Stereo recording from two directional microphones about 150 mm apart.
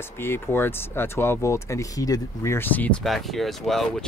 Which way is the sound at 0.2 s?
15° left (ahead or behind).